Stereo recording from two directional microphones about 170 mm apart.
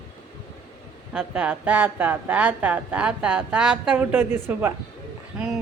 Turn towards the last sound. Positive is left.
turn(degrees=-5)  # may be behind; listen again after turning